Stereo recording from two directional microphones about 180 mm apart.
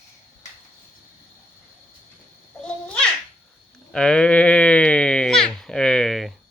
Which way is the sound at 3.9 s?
5° left (ahead or behind).